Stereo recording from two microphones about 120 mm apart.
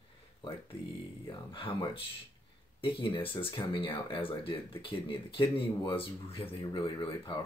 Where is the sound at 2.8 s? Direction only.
45° left (ahead or behind).